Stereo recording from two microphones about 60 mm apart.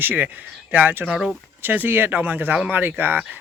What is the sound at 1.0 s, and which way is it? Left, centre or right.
Speech, centre.